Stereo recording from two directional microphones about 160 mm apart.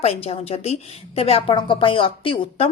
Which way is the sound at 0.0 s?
40° left (ahead or behind).